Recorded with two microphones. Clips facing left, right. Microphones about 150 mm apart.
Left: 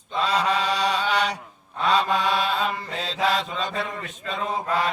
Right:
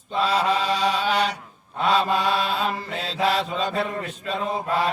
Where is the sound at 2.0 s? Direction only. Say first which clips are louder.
Right 1 dB; 5° right (ahead or behind).